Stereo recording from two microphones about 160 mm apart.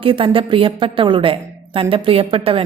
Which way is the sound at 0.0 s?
35° right (ahead or behind).